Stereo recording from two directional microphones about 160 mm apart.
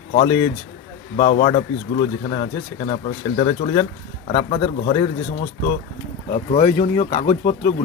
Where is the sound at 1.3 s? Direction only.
45° left (ahead or behind).